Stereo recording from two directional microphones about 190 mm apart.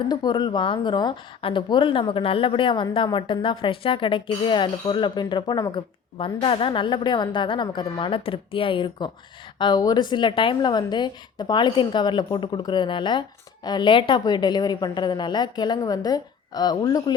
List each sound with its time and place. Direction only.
0.1 s a woman's voice: 20° left (ahead or behind)